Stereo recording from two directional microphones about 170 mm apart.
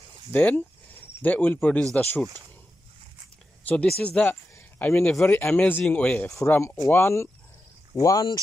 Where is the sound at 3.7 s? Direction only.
10° left (ahead or behind).